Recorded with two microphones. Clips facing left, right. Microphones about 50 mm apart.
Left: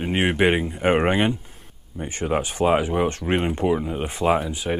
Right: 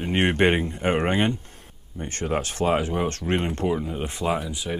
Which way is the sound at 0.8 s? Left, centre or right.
Centre.